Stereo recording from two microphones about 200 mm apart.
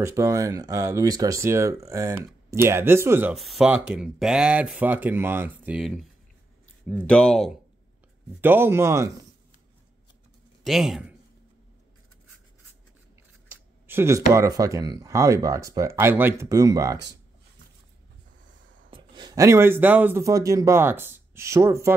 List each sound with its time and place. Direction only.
0.0 s speech: 15° right (ahead or behind)
7.1 s speech: 5° left (ahead or behind)
8.4 s speech: 10° right (ahead or behind)
10.6 s a man's voice: centre (ahead or behind)
13.8 s speech: 10° right (ahead or behind)
18.9 s speech: 20° right (ahead or behind)